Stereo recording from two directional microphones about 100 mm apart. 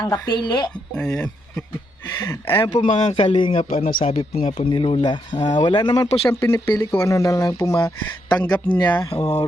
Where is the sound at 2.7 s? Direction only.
45° left (ahead or behind).